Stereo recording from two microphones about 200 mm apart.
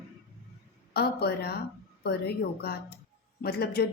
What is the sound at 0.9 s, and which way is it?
A woman's voice, 55° left (ahead or behind).